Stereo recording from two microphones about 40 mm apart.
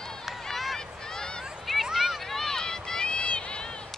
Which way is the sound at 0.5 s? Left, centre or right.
Centre.